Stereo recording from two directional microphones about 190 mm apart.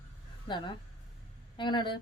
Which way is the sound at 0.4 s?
25° left (ahead or behind).